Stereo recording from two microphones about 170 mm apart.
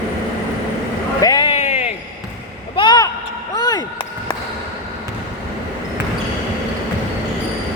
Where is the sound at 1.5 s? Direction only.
40° left (ahead or behind).